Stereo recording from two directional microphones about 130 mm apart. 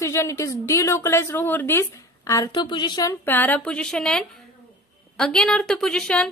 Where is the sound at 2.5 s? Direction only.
40° left (ahead or behind).